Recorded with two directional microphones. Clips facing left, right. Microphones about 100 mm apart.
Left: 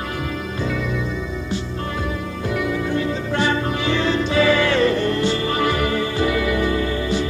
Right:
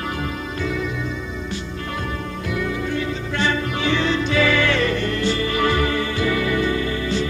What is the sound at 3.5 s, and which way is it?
Music, 35° left (ahead or behind).